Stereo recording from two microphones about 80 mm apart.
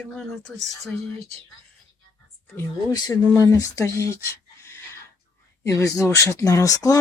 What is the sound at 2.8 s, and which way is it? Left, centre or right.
Speech, left.